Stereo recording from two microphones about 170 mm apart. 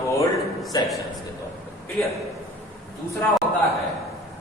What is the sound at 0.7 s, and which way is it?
Speech, 25° left (ahead or behind).